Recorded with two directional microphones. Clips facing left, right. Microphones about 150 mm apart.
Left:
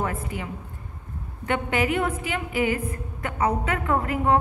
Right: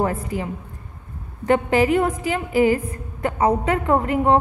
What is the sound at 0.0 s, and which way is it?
A woman's voice, 35° right (ahead or behind).